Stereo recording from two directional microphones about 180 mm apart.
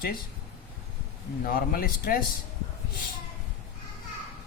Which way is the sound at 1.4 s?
55° left (ahead or behind).